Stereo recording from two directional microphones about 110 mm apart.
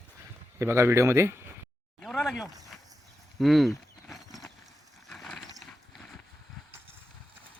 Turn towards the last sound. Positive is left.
turn(degrees=0)  # may be behind; listen again after turning